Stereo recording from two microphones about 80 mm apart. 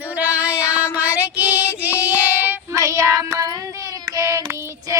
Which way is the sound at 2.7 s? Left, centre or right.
Right.